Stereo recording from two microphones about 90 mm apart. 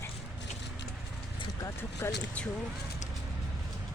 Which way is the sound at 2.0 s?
25° left (ahead or behind).